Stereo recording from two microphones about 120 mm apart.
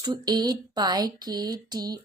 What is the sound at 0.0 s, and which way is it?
Speech, 35° right (ahead or behind).